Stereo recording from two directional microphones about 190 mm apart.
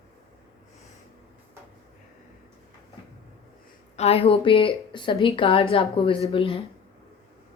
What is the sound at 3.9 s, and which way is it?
A woman's voice, 30° left (ahead or behind).